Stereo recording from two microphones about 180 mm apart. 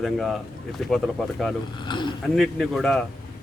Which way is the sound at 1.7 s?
25° left (ahead or behind).